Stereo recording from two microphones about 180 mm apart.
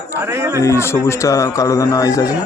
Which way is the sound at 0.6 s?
15° left (ahead or behind).